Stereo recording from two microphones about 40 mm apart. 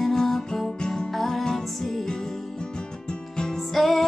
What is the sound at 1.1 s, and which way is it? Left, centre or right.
Music, centre.